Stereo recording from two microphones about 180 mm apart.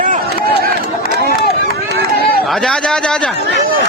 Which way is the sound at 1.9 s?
65° right (ahead or behind).